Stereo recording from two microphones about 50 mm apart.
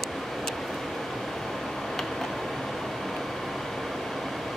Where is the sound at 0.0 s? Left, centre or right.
Centre.